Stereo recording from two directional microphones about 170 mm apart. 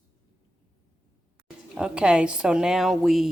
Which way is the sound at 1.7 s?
5° right (ahead or behind).